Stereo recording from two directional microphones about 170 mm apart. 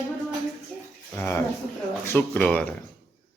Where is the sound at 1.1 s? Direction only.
10° left (ahead or behind).